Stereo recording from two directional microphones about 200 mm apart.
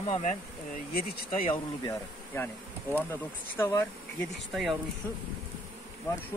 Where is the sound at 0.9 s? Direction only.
50° left (ahead or behind).